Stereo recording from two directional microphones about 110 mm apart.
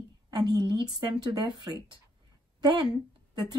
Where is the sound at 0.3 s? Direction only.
40° right (ahead or behind).